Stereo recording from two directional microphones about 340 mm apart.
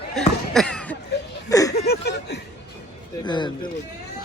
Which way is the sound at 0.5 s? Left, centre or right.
Centre.